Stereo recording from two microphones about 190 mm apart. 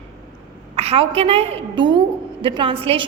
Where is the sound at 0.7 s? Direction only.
30° right (ahead or behind).